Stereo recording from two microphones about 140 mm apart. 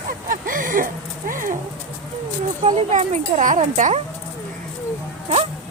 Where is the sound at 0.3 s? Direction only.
75° right (ahead or behind).